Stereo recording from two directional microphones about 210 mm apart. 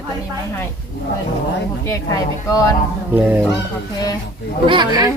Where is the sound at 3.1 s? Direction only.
10° right (ahead or behind).